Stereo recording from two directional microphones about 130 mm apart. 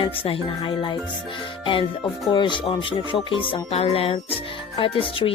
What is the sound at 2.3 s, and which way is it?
Speech, 35° left (ahead or behind).